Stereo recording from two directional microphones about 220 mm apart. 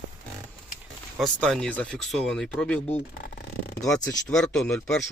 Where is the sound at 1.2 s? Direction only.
5° left (ahead or behind).